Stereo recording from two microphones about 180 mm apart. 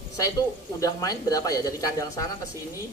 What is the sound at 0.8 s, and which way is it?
A man's voice, 20° left (ahead or behind).